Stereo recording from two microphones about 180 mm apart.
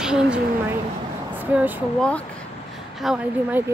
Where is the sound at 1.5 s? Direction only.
10° right (ahead or behind).